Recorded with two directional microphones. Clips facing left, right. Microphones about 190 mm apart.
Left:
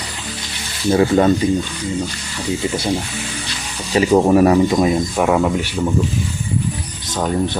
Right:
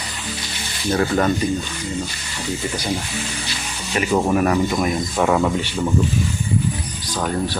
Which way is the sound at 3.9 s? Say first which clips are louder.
Left 6 dB; 35° left (ahead or behind).